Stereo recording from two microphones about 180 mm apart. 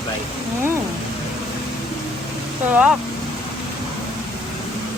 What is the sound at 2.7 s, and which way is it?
Speech, 5° right (ahead or behind).